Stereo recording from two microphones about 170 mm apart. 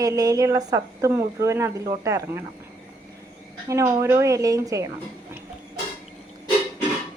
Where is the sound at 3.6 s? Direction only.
20° right (ahead or behind).